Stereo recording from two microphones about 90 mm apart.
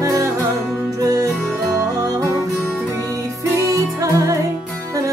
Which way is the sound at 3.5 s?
35° right (ahead or behind).